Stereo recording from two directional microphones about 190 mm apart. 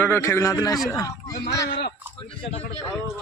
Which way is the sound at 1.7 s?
60° left (ahead or behind).